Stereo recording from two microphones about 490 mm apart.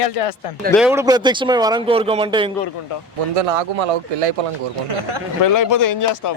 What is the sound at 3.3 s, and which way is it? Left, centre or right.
Speech, right.